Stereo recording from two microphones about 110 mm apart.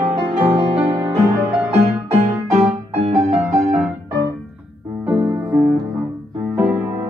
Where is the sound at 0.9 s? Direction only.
30° right (ahead or behind).